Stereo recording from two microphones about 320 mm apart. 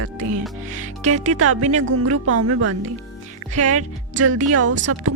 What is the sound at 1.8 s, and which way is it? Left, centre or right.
Speech, right.